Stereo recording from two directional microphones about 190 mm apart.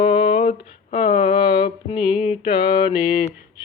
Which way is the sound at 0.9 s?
30° left (ahead or behind).